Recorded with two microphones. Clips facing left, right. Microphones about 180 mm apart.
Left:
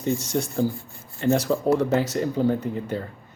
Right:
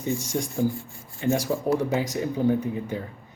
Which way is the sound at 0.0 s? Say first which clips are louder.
Left 3 dB; 15° right (ahead or behind).